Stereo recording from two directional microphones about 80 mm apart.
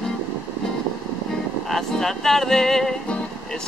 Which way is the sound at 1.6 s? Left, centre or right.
Centre.